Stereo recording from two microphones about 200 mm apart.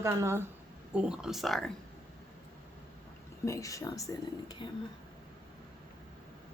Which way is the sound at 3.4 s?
15° left (ahead or behind).